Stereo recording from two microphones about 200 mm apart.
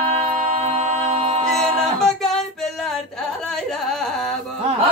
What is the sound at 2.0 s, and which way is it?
Female singing, centre (ahead or behind).